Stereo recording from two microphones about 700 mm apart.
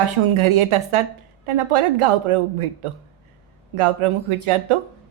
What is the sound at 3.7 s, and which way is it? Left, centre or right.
Speech, right.